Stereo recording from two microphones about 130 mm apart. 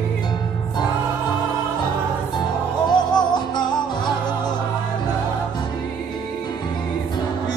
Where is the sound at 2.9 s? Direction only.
35° left (ahead or behind).